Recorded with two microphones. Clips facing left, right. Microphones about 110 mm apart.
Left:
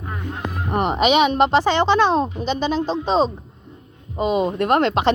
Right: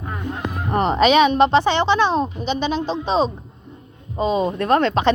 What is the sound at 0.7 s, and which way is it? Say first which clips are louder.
Speech: right 2 dB; 15° left (ahead or behind).